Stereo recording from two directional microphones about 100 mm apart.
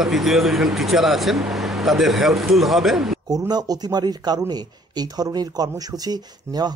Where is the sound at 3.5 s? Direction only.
45° right (ahead or behind).